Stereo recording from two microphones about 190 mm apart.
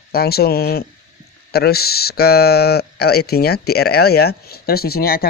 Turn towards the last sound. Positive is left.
turn(degrees=55)  # may be behind; listen again after turning